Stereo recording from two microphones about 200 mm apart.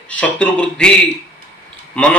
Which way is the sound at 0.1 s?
5° left (ahead or behind).